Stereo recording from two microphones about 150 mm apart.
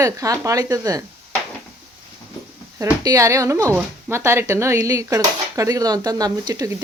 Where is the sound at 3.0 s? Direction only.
20° right (ahead or behind).